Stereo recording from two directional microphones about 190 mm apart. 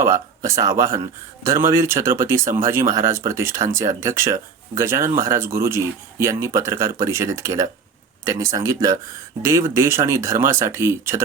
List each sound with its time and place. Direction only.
0.0 s speech: 15° right (ahead or behind)